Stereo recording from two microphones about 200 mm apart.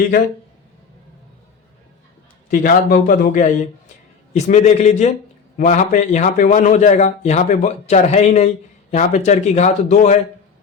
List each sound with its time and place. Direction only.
2.5 s a man's voice: 45° left (ahead or behind)